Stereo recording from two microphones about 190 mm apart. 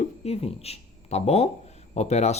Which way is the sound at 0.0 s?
30° left (ahead or behind).